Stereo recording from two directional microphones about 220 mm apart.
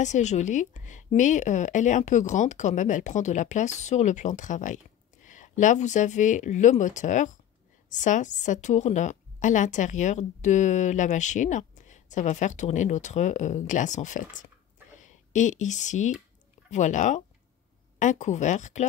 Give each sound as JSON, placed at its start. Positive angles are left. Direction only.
{"t": 0.0, "sound": "a woman's voice", "side_deg": 30}